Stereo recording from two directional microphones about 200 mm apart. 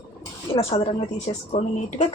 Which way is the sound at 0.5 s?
30° left (ahead or behind).